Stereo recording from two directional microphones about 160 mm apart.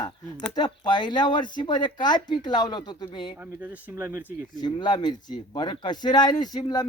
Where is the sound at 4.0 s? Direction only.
15° right (ahead or behind).